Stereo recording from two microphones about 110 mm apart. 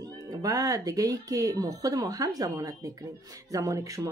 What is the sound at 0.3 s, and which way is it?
Speech, 30° right (ahead or behind).